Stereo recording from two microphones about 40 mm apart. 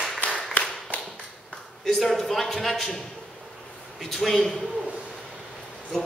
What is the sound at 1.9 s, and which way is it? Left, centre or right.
Speech, centre.